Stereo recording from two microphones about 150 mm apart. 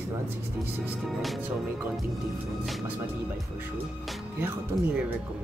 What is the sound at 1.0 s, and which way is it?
Speech, centre (ahead or behind).